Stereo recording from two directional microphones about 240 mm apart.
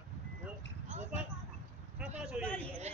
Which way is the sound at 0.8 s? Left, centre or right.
Right.